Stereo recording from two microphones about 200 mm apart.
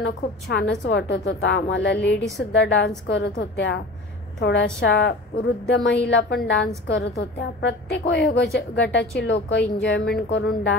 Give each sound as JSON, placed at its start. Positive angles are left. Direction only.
{"t": 0.0, "sound": "a woman's voice", "side_deg": 60}